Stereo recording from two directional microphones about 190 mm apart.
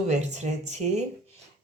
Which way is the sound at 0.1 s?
35° right (ahead or behind).